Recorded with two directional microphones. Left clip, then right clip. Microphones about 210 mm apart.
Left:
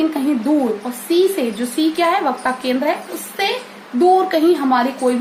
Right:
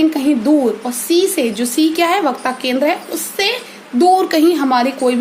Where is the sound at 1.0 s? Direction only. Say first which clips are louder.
Right 1 dB; 55° right (ahead or behind).